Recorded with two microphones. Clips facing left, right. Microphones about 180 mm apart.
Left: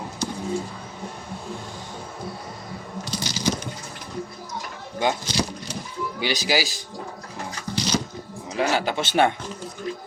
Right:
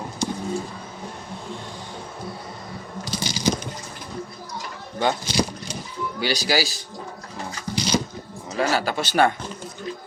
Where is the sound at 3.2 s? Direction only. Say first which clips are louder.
Right 2 dB; 15° right (ahead or behind).